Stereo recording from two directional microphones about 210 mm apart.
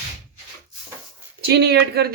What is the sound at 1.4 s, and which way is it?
Speech, 50° right (ahead or behind).